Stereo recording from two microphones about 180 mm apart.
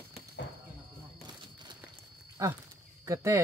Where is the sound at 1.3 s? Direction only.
25° right (ahead or behind).